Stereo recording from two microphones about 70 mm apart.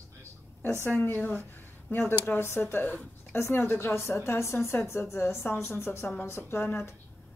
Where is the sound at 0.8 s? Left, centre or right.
Left.